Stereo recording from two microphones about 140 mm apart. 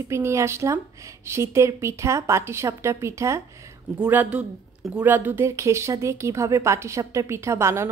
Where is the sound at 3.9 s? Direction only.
10° right (ahead or behind).